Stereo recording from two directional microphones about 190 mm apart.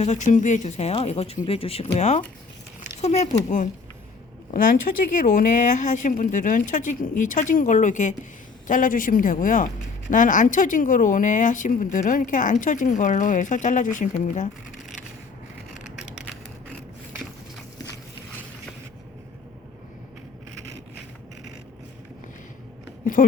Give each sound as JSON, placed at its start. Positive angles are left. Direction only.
{"t": 0.0, "sound": "speech", "side_deg": 40}
{"t": 5.1, "sound": "speech", "side_deg": 45}
{"t": 15.7, "sound": "a sound", "side_deg": -5}